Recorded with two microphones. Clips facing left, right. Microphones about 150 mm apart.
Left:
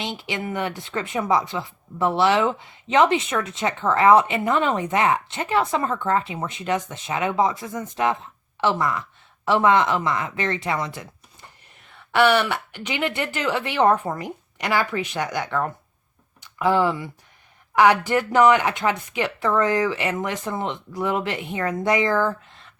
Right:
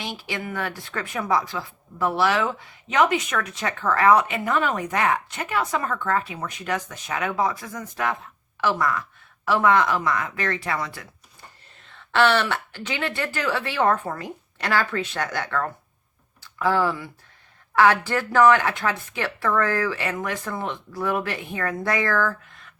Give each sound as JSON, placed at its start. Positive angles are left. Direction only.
{"t": 0.0, "sound": "speech", "side_deg": 20}